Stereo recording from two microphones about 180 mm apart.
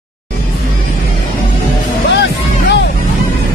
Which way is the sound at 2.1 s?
75° left (ahead or behind).